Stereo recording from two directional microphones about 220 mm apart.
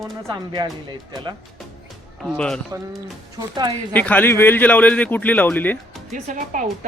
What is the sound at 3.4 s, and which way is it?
Speech, 20° right (ahead or behind).